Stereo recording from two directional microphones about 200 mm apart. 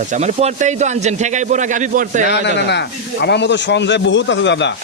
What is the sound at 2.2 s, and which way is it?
A man's voice, 55° left (ahead or behind).